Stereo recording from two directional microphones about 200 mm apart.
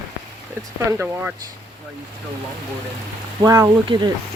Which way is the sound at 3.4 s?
15° right (ahead or behind).